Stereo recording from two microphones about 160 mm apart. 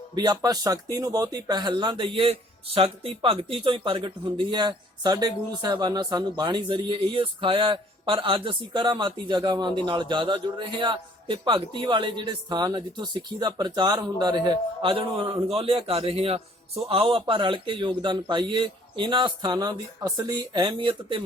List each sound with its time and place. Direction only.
0.1 s a man's voice: 25° right (ahead or behind)